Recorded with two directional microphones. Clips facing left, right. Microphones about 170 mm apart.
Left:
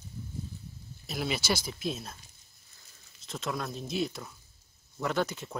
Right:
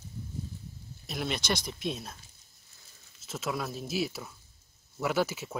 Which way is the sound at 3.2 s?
5° right (ahead or behind).